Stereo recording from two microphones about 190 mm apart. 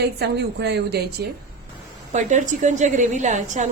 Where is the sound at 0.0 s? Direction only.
60° right (ahead or behind).